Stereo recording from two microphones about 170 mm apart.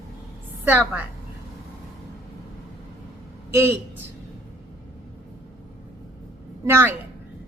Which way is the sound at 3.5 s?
15° right (ahead or behind).